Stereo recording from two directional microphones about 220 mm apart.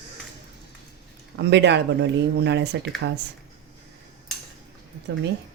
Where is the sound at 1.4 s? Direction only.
50° right (ahead or behind).